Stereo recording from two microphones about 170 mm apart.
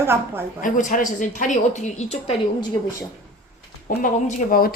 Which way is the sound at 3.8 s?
55° left (ahead or behind).